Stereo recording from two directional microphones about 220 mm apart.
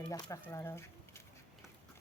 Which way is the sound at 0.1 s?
15° left (ahead or behind).